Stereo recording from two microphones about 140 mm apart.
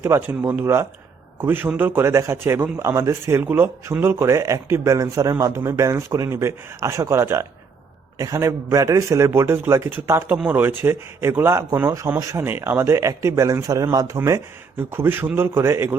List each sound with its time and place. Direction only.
0.0 s a man's voice: 15° right (ahead or behind)